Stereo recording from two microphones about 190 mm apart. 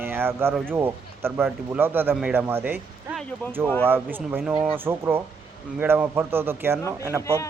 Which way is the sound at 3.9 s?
10° right (ahead or behind).